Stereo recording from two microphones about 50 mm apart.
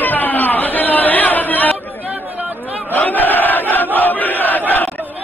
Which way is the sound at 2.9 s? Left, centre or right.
Left.